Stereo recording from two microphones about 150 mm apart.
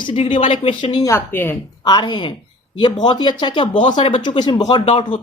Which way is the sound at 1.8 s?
30° left (ahead or behind).